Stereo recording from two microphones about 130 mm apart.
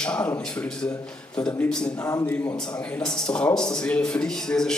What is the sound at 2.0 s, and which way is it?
A man's voice, 20° left (ahead or behind).